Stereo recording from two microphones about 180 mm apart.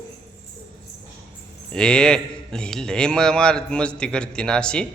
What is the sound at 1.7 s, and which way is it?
A man's voice, 5° left (ahead or behind).